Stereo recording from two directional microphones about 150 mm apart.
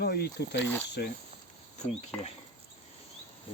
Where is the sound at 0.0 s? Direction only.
90° left.